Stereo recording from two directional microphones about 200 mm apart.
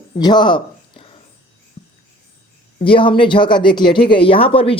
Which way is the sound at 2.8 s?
25° left (ahead or behind).